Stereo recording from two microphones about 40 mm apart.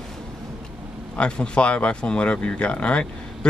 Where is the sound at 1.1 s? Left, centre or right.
Left.